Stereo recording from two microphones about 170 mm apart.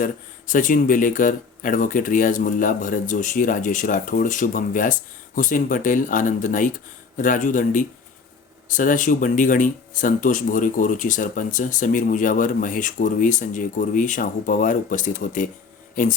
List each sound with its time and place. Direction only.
0.0 s speech: 50° left (ahead or behind)